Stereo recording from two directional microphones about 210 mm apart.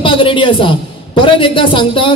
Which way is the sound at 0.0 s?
25° left (ahead or behind).